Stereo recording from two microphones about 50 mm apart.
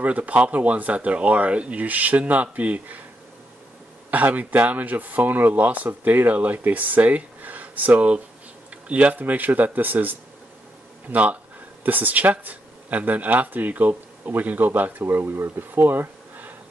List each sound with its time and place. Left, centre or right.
0.0 s speech: right
4.1 s speech: right